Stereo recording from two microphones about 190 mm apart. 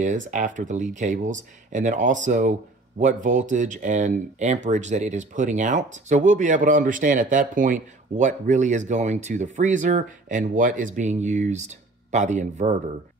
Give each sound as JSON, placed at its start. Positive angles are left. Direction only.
{"t": 0.0, "sound": "speech", "side_deg": -40}